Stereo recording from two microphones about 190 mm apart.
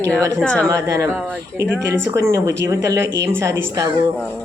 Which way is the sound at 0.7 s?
15° right (ahead or behind).